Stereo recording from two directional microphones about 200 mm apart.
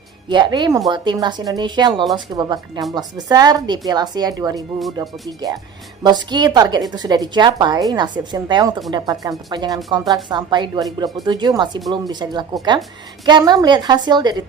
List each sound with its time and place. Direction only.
0.3 s a woman's voice: 20° right (ahead or behind)